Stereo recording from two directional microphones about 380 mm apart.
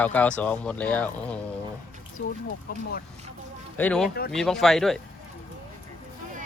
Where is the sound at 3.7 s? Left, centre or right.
Centre.